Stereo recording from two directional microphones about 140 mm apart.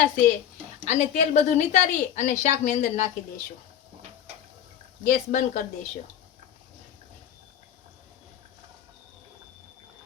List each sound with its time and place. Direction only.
0.9 s a woman's voice: 55° left (ahead or behind)
5.0 s a woman's voice: 60° left (ahead or behind)